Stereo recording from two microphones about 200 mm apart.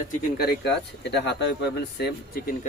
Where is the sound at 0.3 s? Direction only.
55° left (ahead or behind).